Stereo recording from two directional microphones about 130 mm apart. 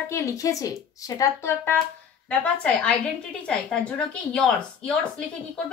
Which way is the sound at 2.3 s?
10° left (ahead or behind).